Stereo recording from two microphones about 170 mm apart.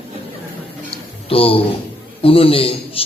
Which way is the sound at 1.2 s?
35° left (ahead or behind).